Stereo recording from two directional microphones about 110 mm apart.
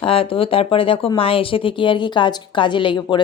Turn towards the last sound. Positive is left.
turn(degrees=50)  # may be behind; listen again after turning